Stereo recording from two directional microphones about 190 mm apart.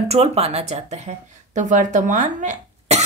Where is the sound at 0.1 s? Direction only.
35° right (ahead or behind).